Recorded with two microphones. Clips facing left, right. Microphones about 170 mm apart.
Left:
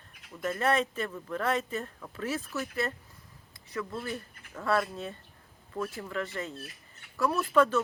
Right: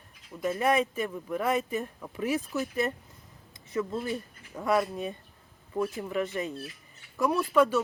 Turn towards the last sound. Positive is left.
turn(degrees=-10)  # may be behind; listen again after turning